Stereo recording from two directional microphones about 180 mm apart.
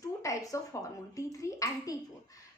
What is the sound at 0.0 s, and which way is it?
Speech, 20° left (ahead or behind).